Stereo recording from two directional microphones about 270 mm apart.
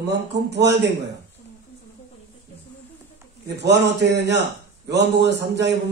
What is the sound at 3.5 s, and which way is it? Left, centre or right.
A man's voice, right.